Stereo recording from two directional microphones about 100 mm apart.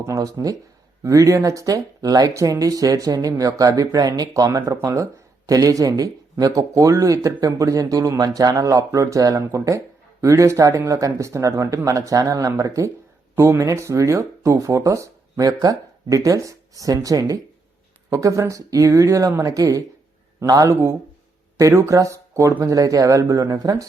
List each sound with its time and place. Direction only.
0.0 s speech: 35° right (ahead or behind)